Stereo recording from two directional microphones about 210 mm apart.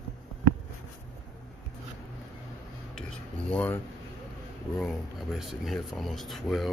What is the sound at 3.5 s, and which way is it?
Speech, 10° left (ahead or behind).